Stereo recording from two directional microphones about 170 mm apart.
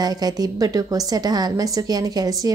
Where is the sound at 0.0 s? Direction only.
20° right (ahead or behind).